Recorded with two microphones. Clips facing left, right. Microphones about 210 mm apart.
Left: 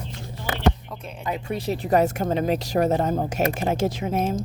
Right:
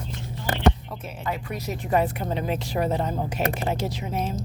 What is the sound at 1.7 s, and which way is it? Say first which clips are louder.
Speech: left 3 dB; 40° left (ahead or behind).